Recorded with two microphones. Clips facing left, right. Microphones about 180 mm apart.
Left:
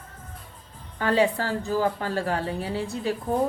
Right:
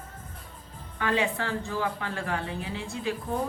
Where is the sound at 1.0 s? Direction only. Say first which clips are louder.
Left 5 dB; 35° left (ahead or behind).